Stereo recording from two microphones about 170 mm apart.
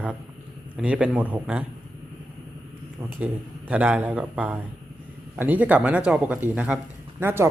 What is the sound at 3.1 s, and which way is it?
Speech, 10° right (ahead or behind).